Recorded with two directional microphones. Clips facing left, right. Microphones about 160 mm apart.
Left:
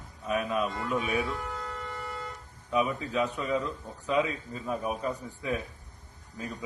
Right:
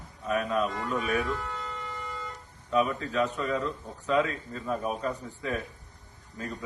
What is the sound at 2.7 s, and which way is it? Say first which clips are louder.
A man's voice: right 1 dB; 15° left (ahead or behind).